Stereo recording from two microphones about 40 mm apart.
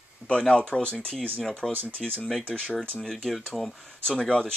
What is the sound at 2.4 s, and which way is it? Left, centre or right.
Speech, centre.